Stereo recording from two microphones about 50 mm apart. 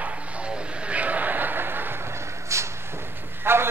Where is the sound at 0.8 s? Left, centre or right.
Right.